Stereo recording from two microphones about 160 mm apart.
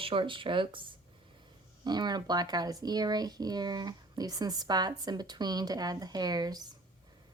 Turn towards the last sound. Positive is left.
turn(degrees=-25)  # may be behind; listen again after turning